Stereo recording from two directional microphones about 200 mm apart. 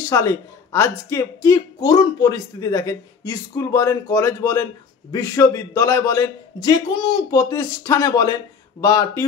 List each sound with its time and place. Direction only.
0.1 s speech: 15° left (ahead or behind)